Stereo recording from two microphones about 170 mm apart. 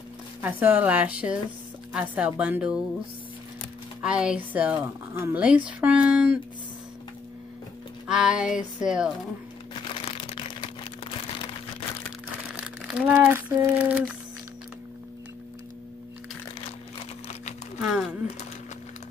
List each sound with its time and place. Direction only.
0.4 s speech: 10° right (ahead or behind)
4.0 s speech: 5° right (ahead or behind)
8.1 s a sound: 5° right (ahead or behind)
9.8 s crumpling: 35° left (ahead or behind)
12.6 s speech: 5° right (ahead or behind)
17.7 s speech: 5° right (ahead or behind)